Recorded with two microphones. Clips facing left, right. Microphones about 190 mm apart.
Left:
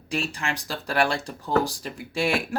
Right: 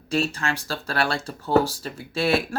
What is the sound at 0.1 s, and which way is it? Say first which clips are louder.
Speech: right 4 dB; 15° left (ahead or behind).